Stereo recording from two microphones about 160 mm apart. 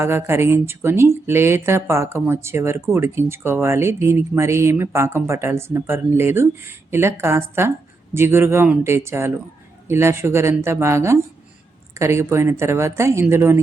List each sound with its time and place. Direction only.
0.0 s speech: 15° right (ahead or behind)